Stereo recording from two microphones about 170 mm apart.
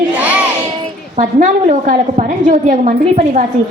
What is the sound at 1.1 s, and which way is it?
A woman's voice, 50° right (ahead or behind).